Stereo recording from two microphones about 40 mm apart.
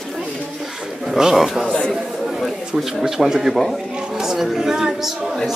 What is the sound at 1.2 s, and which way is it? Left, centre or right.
Speech, centre.